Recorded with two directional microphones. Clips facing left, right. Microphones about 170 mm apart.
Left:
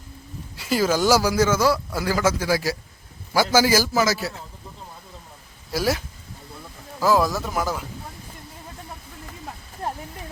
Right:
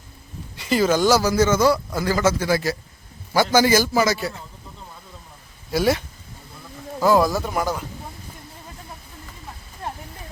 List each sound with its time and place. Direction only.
0.5 s a man's voice: 5° left (ahead or behind)
5.7 s a man's voice: centre (ahead or behind)
7.0 s a man's voice: centre (ahead or behind)
9.8 s a sound: 40° left (ahead or behind)